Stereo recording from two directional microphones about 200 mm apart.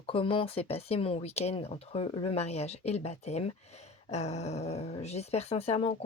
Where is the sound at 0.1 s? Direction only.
25° left (ahead or behind).